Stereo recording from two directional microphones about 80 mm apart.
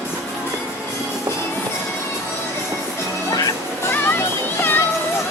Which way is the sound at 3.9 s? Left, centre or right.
Left.